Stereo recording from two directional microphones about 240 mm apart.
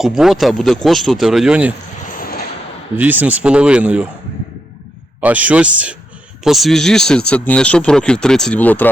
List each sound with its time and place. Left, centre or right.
0.0 s speech: centre
2.1 s a sound: left
3.0 s speech: centre
5.2 s speech: centre